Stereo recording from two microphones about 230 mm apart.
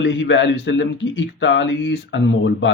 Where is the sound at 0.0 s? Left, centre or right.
Left.